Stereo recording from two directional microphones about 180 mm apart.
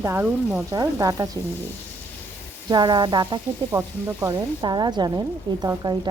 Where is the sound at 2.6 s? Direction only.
25° right (ahead or behind).